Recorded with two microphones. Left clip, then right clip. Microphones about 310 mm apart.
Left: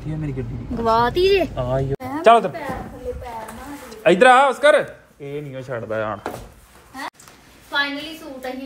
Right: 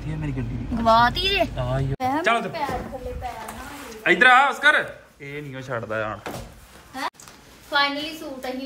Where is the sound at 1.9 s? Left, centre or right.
Centre.